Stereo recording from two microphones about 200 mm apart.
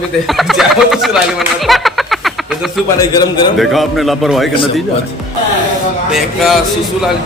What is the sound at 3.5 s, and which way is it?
Speech, centre (ahead or behind).